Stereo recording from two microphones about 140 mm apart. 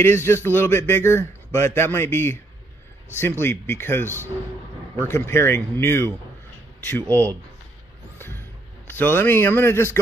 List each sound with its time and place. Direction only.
0.0 s a man's voice: 15° left (ahead or behind)
8.2 s vehicle: 15° left (ahead or behind)
8.9 s a man's voice: 15° left (ahead or behind)